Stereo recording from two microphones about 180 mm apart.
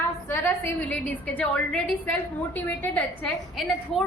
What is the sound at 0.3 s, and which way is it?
A woman's voice, 10° left (ahead or behind).